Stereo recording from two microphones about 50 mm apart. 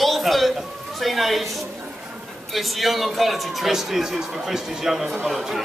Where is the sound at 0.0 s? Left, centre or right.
Centre.